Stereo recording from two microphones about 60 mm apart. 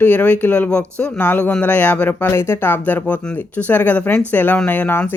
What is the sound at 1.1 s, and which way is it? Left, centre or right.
Speech, left.